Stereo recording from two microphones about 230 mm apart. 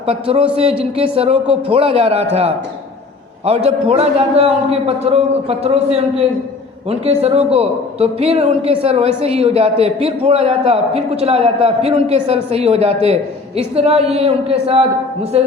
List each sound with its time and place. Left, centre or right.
0.1 s speech: right
3.4 s speech: right